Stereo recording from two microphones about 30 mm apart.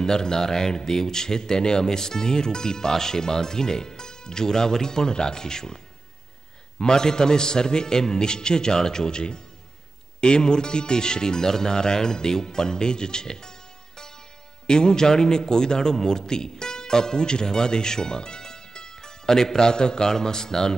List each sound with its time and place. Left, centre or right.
0.0 s a man's voice: centre
6.8 s a man's voice: left